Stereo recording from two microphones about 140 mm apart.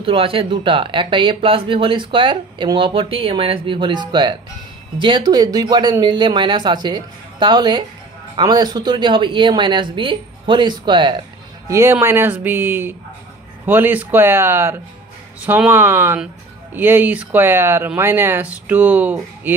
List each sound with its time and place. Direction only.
0.0 s speech: 40° right (ahead or behind)
11.6 s speech: 20° right (ahead or behind)